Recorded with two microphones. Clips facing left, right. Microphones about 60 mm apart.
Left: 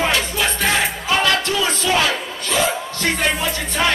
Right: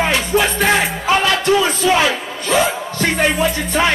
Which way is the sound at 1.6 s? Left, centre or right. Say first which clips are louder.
Right 4 dB; centre.